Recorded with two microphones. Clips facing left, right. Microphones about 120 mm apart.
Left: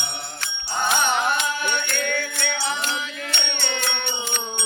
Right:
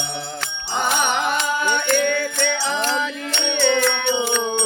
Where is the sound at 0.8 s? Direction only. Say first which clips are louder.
Right 1 dB; 80° right.